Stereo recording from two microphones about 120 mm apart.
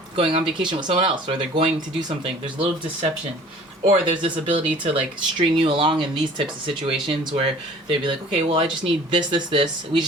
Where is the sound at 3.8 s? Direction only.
45° right (ahead or behind).